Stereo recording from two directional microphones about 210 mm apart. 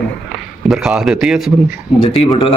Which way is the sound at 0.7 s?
5° right (ahead or behind).